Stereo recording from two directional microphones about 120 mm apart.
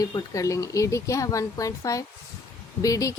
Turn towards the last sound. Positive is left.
turn(degrees=30)  # may be behind; listen again after turning